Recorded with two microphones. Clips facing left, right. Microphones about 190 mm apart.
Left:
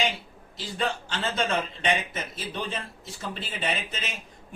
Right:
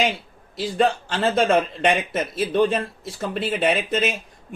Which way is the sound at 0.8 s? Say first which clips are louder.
Right 9 dB; 55° right (ahead or behind).